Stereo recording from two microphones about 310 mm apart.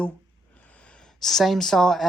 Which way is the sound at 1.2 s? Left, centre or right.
Centre.